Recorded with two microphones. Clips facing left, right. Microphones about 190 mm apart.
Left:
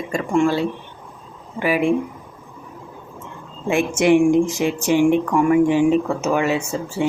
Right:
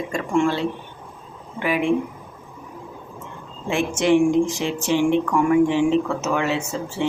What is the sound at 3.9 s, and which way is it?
Speech, 10° left (ahead or behind).